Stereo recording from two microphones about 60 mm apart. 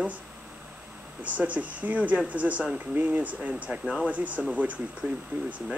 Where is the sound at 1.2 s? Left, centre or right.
Right.